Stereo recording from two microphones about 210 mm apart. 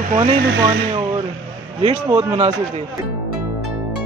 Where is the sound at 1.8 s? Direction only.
25° right (ahead or behind).